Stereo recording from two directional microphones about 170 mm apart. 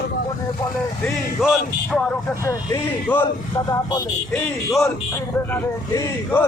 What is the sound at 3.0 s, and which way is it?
Speech, 10° left (ahead or behind).